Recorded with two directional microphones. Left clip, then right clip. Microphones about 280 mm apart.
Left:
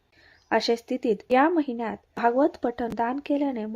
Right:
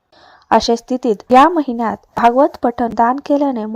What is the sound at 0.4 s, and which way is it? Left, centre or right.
Speech, right.